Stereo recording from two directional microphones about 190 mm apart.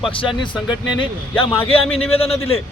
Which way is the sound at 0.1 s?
25° left (ahead or behind).